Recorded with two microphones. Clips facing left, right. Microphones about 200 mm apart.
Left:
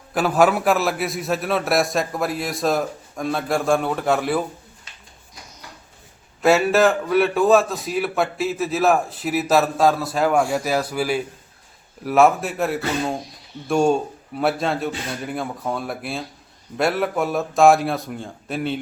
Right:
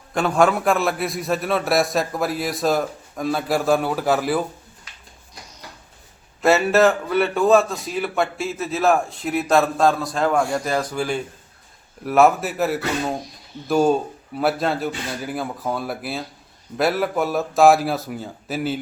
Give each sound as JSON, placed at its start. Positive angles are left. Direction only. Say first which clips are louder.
{"t": 0.1, "sound": "a man's voice", "louder": "left 1 dB", "side_deg": 5}
{"t": 4.9, "sound": "a sound", "louder": "even", "side_deg": 25}
{"t": 6.4, "sound": "a man's voice", "louder": "even", "side_deg": 0}